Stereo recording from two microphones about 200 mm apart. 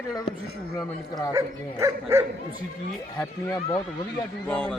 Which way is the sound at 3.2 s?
15° left (ahead or behind).